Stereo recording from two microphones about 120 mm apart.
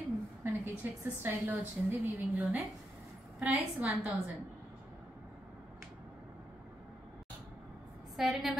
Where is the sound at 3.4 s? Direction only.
15° right (ahead or behind).